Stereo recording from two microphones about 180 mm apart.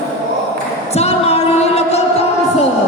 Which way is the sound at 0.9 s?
35° left (ahead or behind).